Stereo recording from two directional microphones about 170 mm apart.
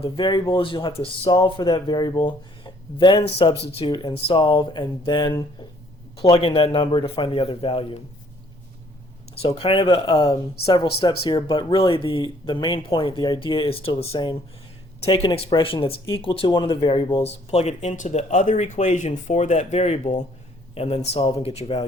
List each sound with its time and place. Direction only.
0.0 s speech: 25° left (ahead or behind)
9.6 s speech: 30° left (ahead or behind)